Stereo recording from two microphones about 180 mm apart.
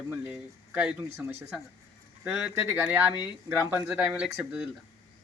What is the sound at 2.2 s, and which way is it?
Speech, 5° right (ahead or behind).